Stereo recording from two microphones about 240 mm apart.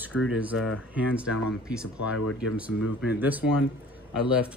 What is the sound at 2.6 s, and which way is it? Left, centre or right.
Speech, centre.